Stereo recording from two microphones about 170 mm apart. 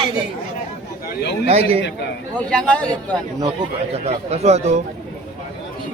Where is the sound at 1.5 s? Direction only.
35° right (ahead or behind).